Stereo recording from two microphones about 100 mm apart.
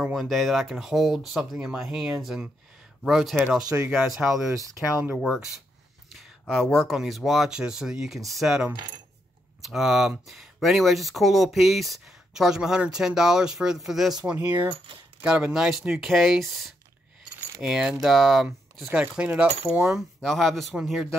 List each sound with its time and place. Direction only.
0.0 s speech: centre (ahead or behind)
4.5 s speech: 30° right (ahead or behind)
5.1 s speech: 5° right (ahead or behind)
6.4 s speech: 5° left (ahead or behind)
14.2 s speech: 15° right (ahead or behind)
18.9 s speech: 10° right (ahead or behind)
20.2 s speech: centre (ahead or behind)